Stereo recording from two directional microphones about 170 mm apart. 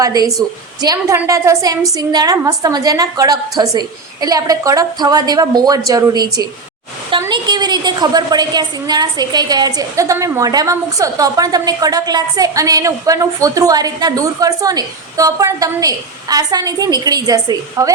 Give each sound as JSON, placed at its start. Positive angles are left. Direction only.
{"t": 0.0, "sound": "a woman's voice", "side_deg": -20}